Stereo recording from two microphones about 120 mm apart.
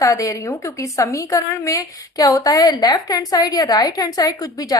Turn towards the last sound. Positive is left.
turn(degrees=30)  # may be behind; listen again after turning